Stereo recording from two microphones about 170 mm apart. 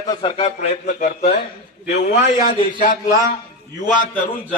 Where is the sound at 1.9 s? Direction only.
70° left (ahead or behind).